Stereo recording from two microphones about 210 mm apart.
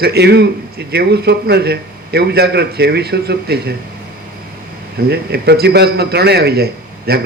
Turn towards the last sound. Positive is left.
turn(degrees=-50)  # may be behind; listen again after turning